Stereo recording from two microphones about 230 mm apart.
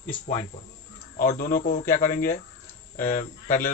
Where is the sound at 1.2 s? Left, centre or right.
Left.